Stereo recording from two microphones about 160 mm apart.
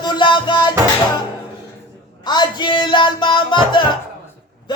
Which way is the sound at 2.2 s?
25° left (ahead or behind).